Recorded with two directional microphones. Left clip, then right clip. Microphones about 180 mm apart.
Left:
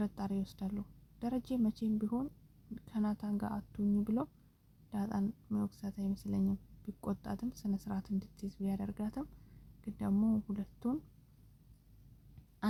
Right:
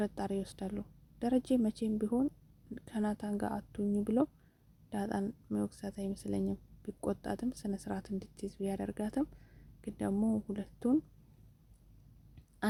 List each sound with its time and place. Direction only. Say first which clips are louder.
0.0 s speech: right 4 dB; 30° right (ahead or behind)